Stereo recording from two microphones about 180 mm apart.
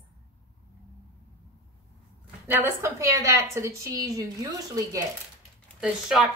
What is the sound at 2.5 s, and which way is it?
A woman's voice, 10° right (ahead or behind).